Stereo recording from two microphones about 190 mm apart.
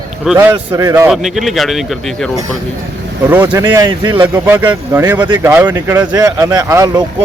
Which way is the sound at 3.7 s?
20° right (ahead or behind).